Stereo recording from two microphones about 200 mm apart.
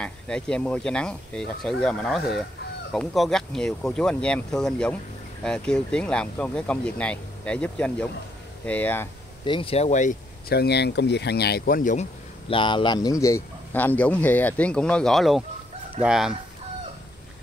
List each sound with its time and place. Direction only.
0.0 s a man's voice: 5° left (ahead or behind)
9.4 s speech: 25° left (ahead or behind)
10.5 s speech: 55° left (ahead or behind)
12.4 s a man's voice: 25° left (ahead or behind); by 16.3 s 5° right (ahead or behind)